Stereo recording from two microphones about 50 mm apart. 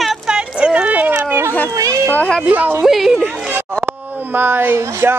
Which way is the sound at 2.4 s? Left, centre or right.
Right.